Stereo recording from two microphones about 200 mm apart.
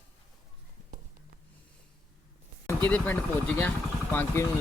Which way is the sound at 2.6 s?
10° left (ahead or behind).